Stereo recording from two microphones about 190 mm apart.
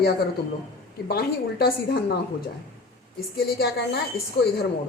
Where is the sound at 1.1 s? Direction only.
55° left (ahead or behind).